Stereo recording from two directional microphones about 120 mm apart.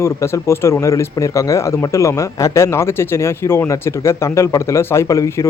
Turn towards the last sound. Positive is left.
turn(degrees=25)  # may be behind; listen again after turning